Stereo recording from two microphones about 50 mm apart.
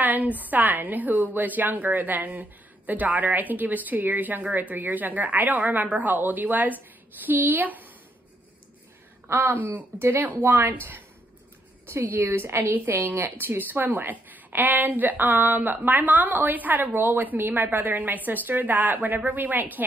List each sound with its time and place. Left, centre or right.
0.0 s a woman's voice: right
9.3 s a woman's voice: right
9.6 s a woman's voice: right
9.9 s a woman's voice: right
12.2 s a woman's voice: right
12.5 s a woman's voice: right